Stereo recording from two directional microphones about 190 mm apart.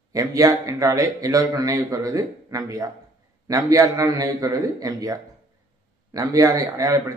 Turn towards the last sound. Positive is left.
turn(degrees=-20)  # may be behind; listen again after turning